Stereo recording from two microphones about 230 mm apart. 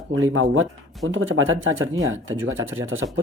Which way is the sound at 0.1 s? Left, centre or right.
Right.